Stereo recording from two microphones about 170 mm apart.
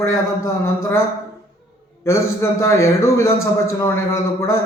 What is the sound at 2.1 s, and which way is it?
A man's voice, 15° left (ahead or behind).